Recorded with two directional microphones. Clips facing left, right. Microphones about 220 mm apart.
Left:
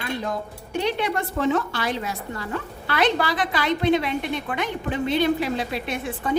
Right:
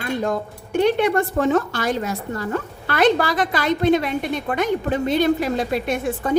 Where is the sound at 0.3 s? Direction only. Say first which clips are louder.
Right 5 dB; 50° right (ahead or behind).